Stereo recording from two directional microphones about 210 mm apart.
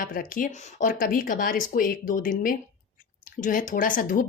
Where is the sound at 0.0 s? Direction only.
40° left (ahead or behind).